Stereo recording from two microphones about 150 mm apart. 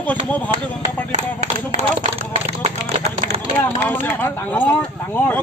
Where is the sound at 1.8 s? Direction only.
45° right (ahead or behind).